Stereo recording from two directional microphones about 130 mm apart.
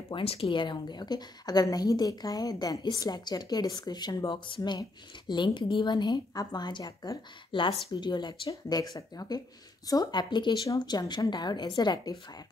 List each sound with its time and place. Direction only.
0.1 s a woman's voice: 45° left (ahead or behind)